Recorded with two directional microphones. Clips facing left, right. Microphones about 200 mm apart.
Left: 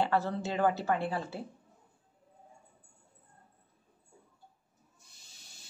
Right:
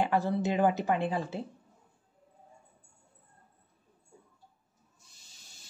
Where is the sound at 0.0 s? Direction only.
15° right (ahead or behind).